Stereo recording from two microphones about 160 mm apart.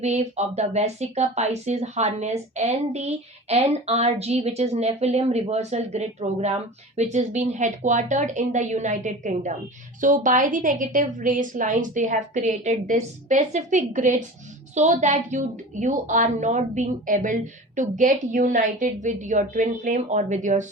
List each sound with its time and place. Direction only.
0.0 s speech: 45° right (ahead or behind)